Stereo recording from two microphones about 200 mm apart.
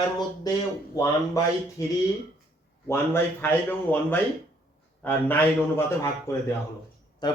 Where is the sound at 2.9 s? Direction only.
10° left (ahead or behind).